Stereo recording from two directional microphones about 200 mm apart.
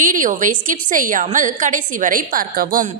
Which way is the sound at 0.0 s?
40° right (ahead or behind).